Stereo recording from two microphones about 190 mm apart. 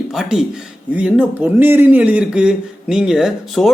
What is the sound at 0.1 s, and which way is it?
Speech, centre (ahead or behind).